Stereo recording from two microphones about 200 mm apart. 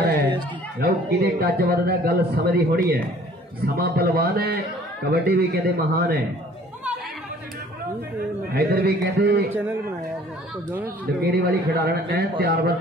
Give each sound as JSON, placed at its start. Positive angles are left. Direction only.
{"t": 0.0, "sound": "a sound", "side_deg": -45}
{"t": 0.7, "sound": "a man's voice", "side_deg": -50}
{"t": 8.5, "sound": "a man's voice", "side_deg": -50}
{"t": 9.5, "sound": "a man's voice", "side_deg": -10}
{"t": 11.2, "sound": "a man's voice", "side_deg": -50}